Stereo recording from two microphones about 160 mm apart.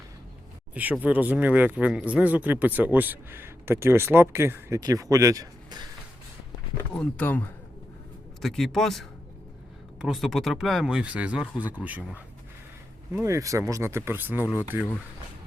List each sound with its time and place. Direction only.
0.7 s speech: 10° right (ahead or behind)
7.0 s speech: 10° left (ahead or behind); by 14.6 s 10° right (ahead or behind)